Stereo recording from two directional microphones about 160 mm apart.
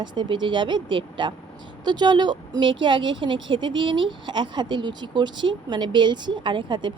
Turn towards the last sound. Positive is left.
turn(degrees=-30)  # may be behind; listen again after turning